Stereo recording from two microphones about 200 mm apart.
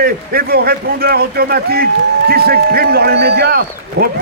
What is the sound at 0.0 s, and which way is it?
Speech, 50° right (ahead or behind).